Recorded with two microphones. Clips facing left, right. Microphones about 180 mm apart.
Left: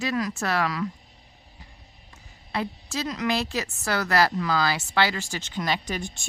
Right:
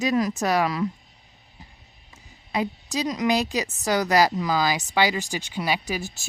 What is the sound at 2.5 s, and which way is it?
Speech, 15° right (ahead or behind).